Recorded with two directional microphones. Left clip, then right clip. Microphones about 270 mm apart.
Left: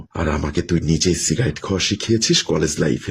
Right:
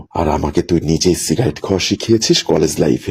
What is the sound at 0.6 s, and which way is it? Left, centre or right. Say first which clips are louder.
Speech: right 5 dB; centre.